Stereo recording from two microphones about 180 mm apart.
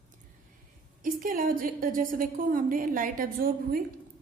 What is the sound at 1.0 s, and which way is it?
A woman's voice, 50° right (ahead or behind).